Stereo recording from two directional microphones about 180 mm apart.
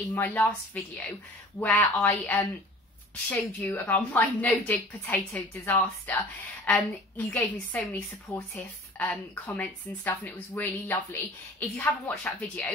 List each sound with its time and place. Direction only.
0.1 s a woman's voice: 10° left (ahead or behind)
1.6 s a woman's voice: 5° left (ahead or behind)